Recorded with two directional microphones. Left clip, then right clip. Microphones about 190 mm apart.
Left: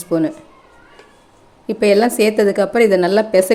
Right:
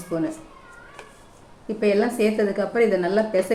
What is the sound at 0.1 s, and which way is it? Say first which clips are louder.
Speech: left 9 dB; 50° left (ahead or behind).